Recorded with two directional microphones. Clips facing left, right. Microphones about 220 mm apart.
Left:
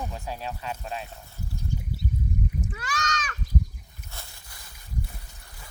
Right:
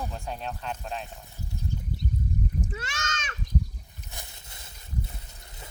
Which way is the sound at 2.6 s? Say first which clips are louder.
Left 3 dB; 25° right (ahead or behind).